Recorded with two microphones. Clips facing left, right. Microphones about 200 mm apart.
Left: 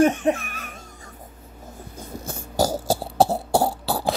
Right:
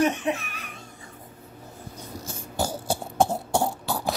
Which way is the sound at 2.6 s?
40° left (ahead or behind).